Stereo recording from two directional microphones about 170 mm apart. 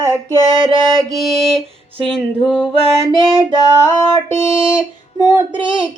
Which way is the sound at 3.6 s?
15° left (ahead or behind).